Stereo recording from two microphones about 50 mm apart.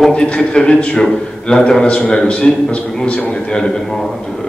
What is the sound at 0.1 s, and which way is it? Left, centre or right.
A man's voice, left.